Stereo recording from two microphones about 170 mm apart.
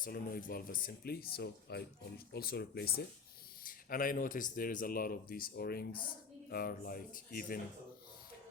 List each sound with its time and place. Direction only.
0.0 s speech: 60° left (ahead or behind)
3.6 s speech: 55° left (ahead or behind)